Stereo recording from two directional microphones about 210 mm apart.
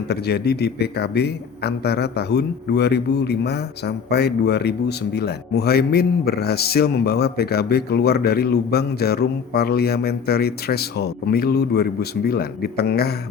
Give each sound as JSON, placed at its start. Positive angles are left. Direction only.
{"t": 0.1, "sound": "speech", "side_deg": 50}